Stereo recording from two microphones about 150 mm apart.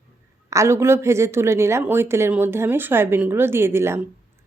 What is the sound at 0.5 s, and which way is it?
A woman's voice, 20° right (ahead or behind).